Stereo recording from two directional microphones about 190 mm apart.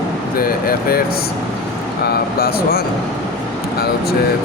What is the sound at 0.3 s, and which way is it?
Speech, 50° left (ahead or behind).